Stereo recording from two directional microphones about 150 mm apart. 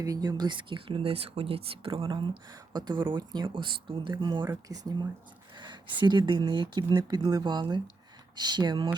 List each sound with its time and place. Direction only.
0.0 s speech: 25° right (ahead or behind)